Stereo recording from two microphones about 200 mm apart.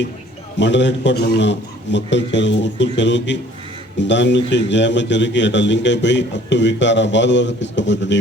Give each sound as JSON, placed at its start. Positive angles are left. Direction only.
{"t": 0.6, "sound": "a man's voice", "side_deg": 65}